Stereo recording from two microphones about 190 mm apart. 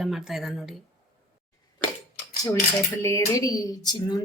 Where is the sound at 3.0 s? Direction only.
15° left (ahead or behind).